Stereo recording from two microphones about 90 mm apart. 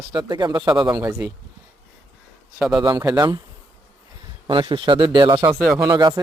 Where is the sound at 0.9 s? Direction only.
30° right (ahead or behind).